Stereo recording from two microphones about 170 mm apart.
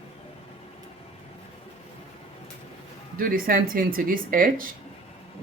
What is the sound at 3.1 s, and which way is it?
Speech, 55° right (ahead or behind).